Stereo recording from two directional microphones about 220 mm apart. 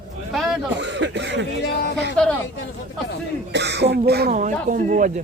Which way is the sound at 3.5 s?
50° right (ahead or behind).